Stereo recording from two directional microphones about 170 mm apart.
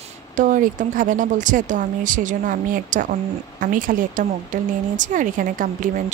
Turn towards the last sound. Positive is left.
turn(degrees=-50)  # may be behind; listen again after turning